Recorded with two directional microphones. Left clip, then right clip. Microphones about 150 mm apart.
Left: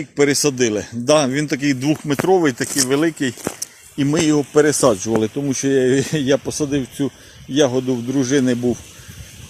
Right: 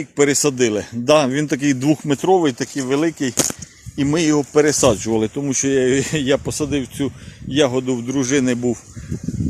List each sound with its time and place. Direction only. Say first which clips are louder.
0.2 s speech: even; 25° right (ahead or behind); by 2.1 s 55° right (ahead or behind)
2.4 s speech: left 2 dB; 5° right (ahead or behind)